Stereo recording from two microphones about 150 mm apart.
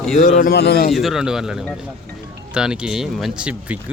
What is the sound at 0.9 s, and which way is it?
Speech, centre (ahead or behind).